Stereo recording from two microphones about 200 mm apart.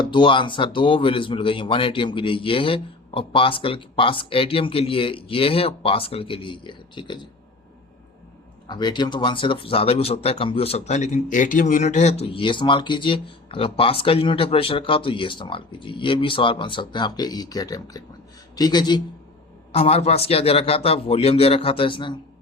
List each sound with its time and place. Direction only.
0.0 s speech: 25° left (ahead or behind)
8.6 s speech: 20° left (ahead or behind)
19.7 s speech: 30° left (ahead or behind)